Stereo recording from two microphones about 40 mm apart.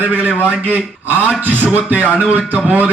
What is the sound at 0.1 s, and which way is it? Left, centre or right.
A man's voice, right.